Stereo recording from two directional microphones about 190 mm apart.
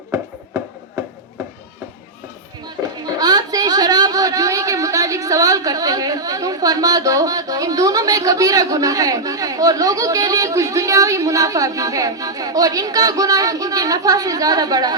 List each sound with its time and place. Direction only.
3.2 s a woman's voice: 20° right (ahead or behind)